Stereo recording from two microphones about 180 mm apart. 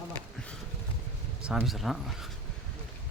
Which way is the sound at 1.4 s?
5° right (ahead or behind).